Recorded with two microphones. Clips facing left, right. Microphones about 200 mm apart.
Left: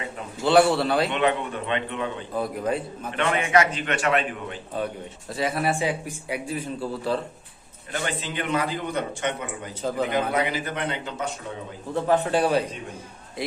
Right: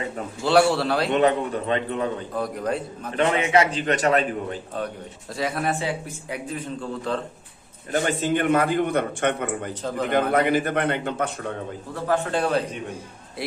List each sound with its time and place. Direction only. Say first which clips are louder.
0.4 s a man's voice: even; centre (ahead or behind)
1.1 s a man's voice: right 4 dB; 40° right (ahead or behind)
2.3 s a man's voice: even; centre (ahead or behind)
3.2 s a man's voice: right 2 dB; 30° right (ahead or behind)
5.4 s speech: left 1 dB; centre (ahead or behind)
7.9 s a man's voice: right 7 dB; 45° right (ahead or behind)
12.0 s speech: left 1 dB; 15° left (ahead or behind)